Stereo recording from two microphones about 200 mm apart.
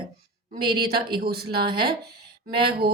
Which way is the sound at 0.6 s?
50° right (ahead or behind).